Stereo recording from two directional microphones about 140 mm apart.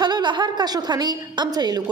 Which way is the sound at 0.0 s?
30° right (ahead or behind).